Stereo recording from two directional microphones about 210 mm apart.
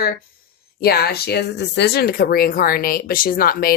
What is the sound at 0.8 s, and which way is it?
A woman's voice, 50° left (ahead or behind).